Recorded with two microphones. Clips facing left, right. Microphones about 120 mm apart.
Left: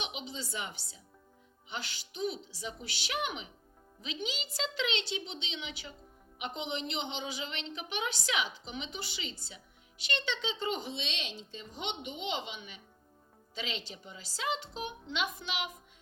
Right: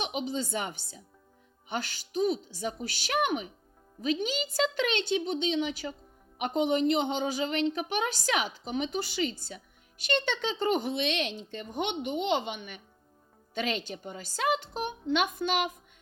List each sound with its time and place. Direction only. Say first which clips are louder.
0.0 s a woman's voice: right 9 dB; 45° right (ahead or behind)